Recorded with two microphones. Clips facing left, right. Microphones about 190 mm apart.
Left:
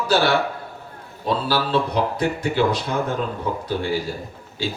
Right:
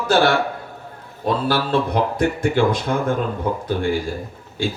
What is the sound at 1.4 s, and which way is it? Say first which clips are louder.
A man's voice: right 1 dB; 50° right (ahead or behind).